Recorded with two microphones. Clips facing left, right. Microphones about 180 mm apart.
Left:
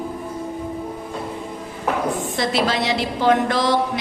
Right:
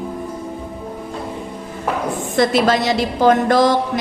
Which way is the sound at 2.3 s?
45° right (ahead or behind).